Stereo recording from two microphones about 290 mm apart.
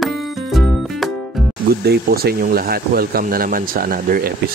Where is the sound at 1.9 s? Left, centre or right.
Right.